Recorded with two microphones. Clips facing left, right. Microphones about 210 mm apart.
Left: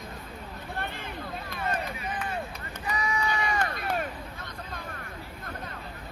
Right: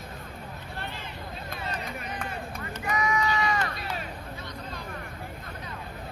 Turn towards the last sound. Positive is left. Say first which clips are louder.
# right 2 dB
turn(degrees=50)  # may be behind; listen again after turning